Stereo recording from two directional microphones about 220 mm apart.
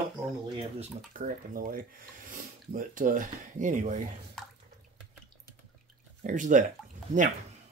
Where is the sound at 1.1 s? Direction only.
40° right (ahead or behind).